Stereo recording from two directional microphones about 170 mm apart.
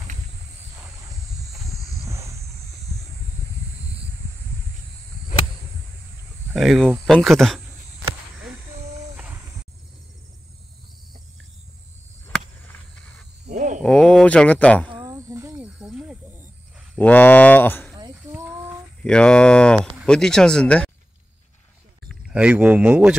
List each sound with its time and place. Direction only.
6.5 s speech: centre (ahead or behind)
9.1 s a sound: 5° right (ahead or behind)
12.3 s a sound: 5° left (ahead or behind)
13.5 s a sound: 45° right (ahead or behind)
13.8 s speech: 5° left (ahead or behind)
14.9 s cricket: 25° right (ahead or behind)
15.5 s snake: 5° right (ahead or behind)
17.0 s speech: 10° left (ahead or behind)
19.0 s speech: 5° left (ahead or behind)
22.3 s speech: 5° right (ahead or behind)